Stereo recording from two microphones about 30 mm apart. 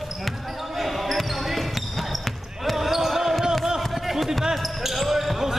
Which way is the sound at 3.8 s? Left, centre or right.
Centre.